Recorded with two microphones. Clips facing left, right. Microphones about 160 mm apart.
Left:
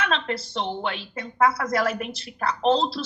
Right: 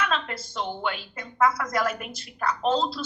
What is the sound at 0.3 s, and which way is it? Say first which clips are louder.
A woman's voice: left 3 dB; 30° left (ahead or behind).